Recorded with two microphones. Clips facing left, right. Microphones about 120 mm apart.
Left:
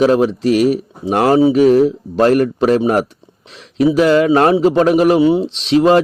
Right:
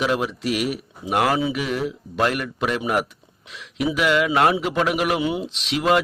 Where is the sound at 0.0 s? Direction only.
35° left (ahead or behind).